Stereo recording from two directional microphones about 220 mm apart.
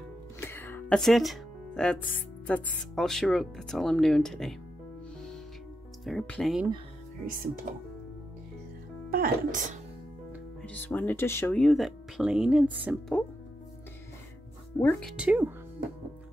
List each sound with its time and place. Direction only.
0.4 s speech: 10° left (ahead or behind)
6.0 s speech: 5° left (ahead or behind)
7.7 s speech: 40° right (ahead or behind)
9.1 s speech: 40° right (ahead or behind)
10.6 s speech: 5° left (ahead or behind)
14.8 s speech: 5° left (ahead or behind)